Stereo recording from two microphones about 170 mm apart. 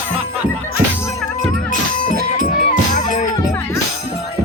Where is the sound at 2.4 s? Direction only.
50° left (ahead or behind).